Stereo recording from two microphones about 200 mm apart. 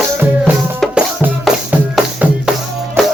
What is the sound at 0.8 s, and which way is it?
Music, 5° right (ahead or behind).